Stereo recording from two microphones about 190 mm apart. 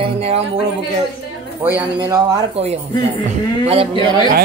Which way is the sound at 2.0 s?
20° right (ahead or behind).